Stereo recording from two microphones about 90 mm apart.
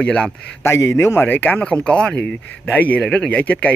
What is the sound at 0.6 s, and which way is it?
Speech, 30° left (ahead or behind).